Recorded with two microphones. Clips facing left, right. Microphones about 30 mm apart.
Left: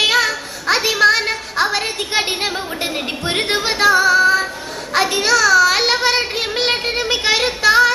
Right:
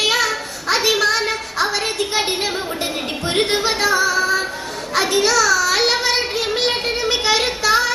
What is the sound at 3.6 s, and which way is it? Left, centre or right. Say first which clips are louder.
Music: left 4 dB; left.